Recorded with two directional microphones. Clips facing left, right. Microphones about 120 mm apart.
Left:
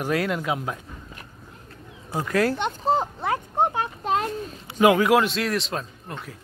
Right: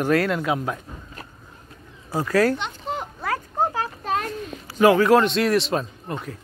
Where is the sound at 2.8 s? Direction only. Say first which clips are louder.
Left 6 dB; 35° left (ahead or behind).